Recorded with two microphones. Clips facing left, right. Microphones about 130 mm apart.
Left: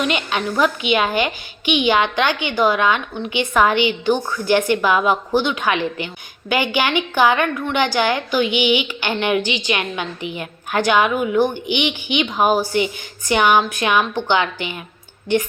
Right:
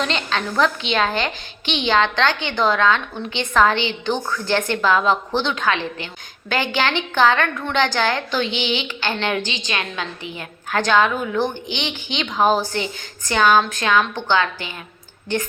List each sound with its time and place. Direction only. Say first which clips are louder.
0.0 s a woman's voice: left 2 dB; 10° left (ahead or behind)